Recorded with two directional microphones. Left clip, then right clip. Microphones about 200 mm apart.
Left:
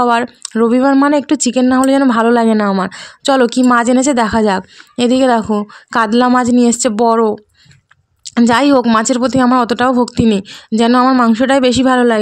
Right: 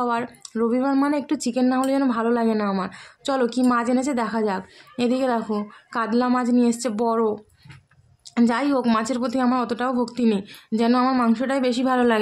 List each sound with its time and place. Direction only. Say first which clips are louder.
0.0 s speech: left 12 dB; 45° left (ahead or behind)
8.4 s speech: left 11 dB; 45° left (ahead or behind)